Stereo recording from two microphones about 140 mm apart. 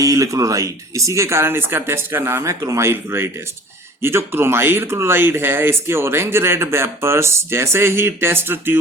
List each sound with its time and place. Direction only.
0.0 s speech: 25° right (ahead or behind)